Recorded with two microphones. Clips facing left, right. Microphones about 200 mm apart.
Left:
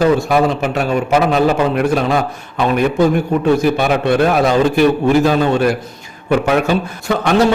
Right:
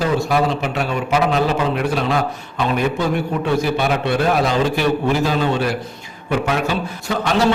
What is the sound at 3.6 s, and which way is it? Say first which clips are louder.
A man's voice: left 4 dB; 50° left (ahead or behind).